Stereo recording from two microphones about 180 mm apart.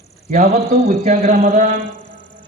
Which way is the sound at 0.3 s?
50° right (ahead or behind).